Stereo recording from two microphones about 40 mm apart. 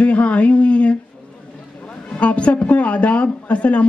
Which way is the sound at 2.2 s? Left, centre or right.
Left.